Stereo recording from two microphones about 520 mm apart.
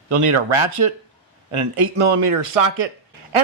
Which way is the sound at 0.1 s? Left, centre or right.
Right.